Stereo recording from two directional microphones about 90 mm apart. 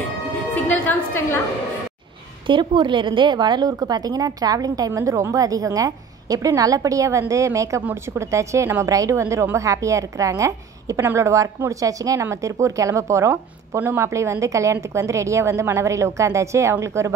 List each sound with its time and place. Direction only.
0.8 s a woman's voice: 25° left (ahead or behind)
2.4 s a woman's voice: 60° right (ahead or behind); by 17.1 s 30° right (ahead or behind)